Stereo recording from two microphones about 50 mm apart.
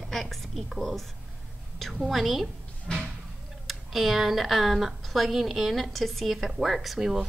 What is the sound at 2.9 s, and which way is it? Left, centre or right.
Speech, centre.